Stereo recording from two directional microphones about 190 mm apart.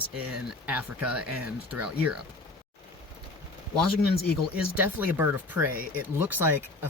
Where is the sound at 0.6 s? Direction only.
10° right (ahead or behind).